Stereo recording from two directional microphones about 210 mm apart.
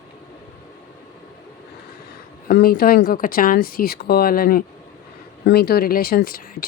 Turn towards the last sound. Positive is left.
turn(degrees=45)  # may be behind; listen again after turning